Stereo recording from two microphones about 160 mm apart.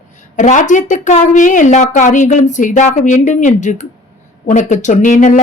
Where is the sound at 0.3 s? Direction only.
50° left (ahead or behind).